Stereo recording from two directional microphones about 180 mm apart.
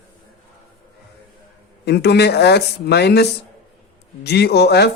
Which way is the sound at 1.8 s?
65° left (ahead or behind).